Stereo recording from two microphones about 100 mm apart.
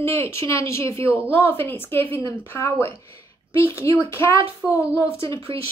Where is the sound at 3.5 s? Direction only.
25° left (ahead or behind).